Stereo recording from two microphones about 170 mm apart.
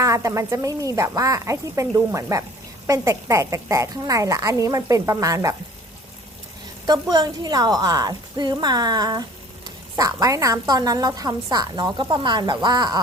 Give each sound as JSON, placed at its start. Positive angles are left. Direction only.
{"t": 0.0, "sound": "a woman's voice", "side_deg": -20}
{"t": 6.8, "sound": "a woman's voice", "side_deg": -25}